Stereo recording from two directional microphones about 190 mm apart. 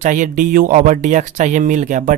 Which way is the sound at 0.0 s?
40° right (ahead or behind).